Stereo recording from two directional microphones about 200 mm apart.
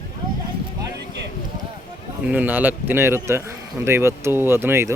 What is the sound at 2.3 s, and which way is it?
Speech, 10° right (ahead or behind).